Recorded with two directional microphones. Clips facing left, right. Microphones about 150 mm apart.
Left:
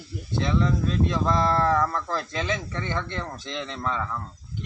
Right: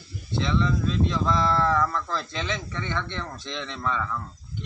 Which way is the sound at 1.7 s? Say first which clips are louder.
Left 1 dB; 15° left (ahead or behind).